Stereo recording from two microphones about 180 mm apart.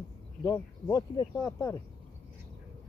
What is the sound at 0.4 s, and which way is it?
Speech, 20° left (ahead or behind).